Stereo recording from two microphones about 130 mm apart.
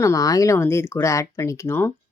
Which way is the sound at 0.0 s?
25° left (ahead or behind).